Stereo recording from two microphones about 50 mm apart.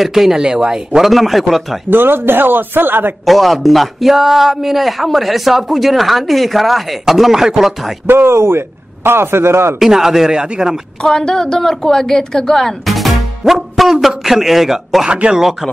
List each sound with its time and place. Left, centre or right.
0.0 s speech: centre
1.0 s a man's voice: centre
1.9 s speech: right
3.3 s a man's voice: centre
8.1 s a man's voice: right
9.8 s speech: centre
11.0 s a woman's voice: centre
15.0 s speech: right